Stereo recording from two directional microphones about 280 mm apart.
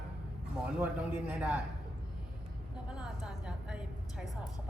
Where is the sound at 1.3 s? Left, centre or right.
Centre.